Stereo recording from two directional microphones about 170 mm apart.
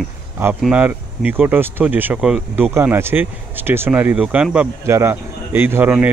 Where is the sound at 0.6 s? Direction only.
5° right (ahead or behind).